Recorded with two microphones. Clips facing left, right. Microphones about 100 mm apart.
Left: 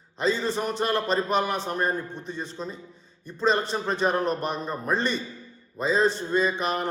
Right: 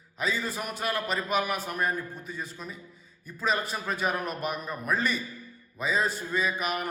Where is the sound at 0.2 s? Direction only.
30° left (ahead or behind).